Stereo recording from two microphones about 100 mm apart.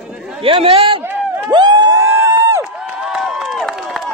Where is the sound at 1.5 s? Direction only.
45° right (ahead or behind).